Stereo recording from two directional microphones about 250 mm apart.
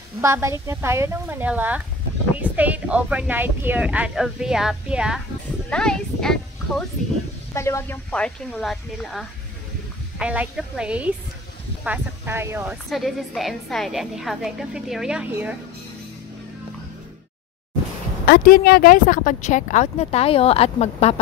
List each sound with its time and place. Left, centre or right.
0.2 s a woman's voice: centre
7.5 s speech: centre
18.2 s a woman's voice: left